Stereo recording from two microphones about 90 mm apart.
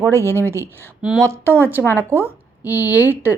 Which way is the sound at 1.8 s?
25° left (ahead or behind).